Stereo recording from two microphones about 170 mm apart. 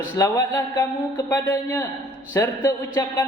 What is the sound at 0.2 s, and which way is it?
Speech, 20° left (ahead or behind).